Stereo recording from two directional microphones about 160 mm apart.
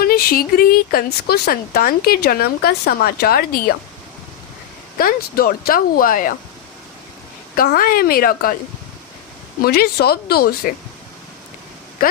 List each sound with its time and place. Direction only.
0.0 s speech: 70° left (ahead or behind)
4.9 s speech: 70° left (ahead or behind)
7.5 s speech: 65° left (ahead or behind)
9.6 s speech: 70° left (ahead or behind)